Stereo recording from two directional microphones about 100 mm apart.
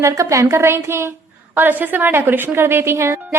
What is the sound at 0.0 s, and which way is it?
A woman's voice, 30° right (ahead or behind).